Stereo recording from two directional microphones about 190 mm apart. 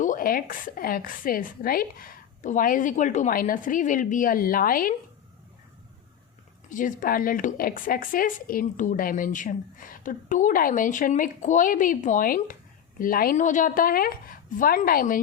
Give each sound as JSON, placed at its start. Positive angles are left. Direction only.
{"t": 0.0, "sound": "a woman's voice", "side_deg": 45}
{"t": 6.7, "sound": "a woman's voice", "side_deg": 45}